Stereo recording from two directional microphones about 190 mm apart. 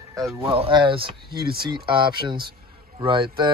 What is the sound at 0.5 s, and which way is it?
Speech, 30° right (ahead or behind).